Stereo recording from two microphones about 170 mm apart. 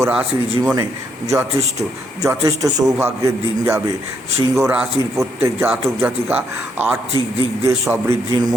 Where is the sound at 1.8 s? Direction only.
20° right (ahead or behind).